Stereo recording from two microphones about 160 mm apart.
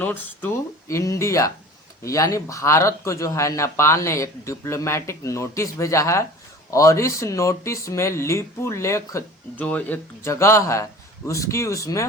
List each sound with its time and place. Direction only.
0.9 s speech: 20° left (ahead or behind)